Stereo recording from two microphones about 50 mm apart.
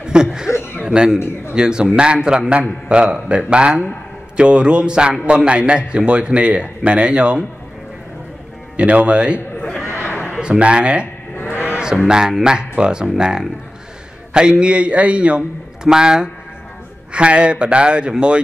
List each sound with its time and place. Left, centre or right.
0.0 s a man's voice: centre
8.7 s a man's voice: right
9.8 s a sound: left
10.4 s a man's voice: centre
11.3 s a sound: left
12.1 s a man's voice: centre